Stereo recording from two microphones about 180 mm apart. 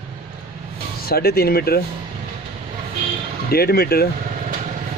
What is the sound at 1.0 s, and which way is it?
Speech, 60° left (ahead or behind).